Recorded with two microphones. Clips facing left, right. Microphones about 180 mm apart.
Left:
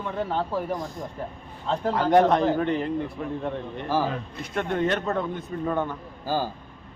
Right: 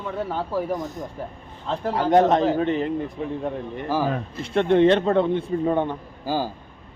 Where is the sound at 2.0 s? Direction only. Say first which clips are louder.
Right 2 dB; 20° right (ahead or behind).